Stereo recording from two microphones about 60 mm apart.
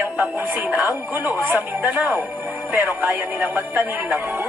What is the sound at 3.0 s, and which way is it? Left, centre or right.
Speech, right.